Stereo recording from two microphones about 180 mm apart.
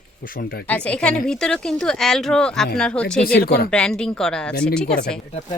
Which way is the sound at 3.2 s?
60° left (ahead or behind).